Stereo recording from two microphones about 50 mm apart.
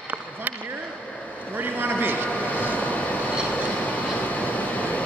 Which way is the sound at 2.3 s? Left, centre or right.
Left.